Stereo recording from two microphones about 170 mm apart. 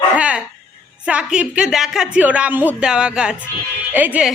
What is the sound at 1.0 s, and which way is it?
A woman's voice, 5° right (ahead or behind).